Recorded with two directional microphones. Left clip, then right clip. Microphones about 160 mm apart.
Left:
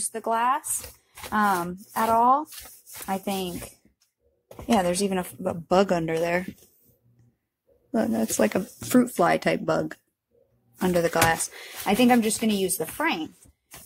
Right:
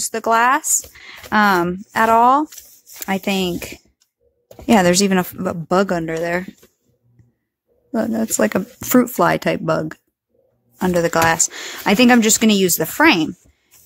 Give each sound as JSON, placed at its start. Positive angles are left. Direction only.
{"t": 0.1, "sound": "speech", "side_deg": -50}
{"t": 5.7, "sound": "speech", "side_deg": -20}
{"t": 7.9, "sound": "speech", "side_deg": -20}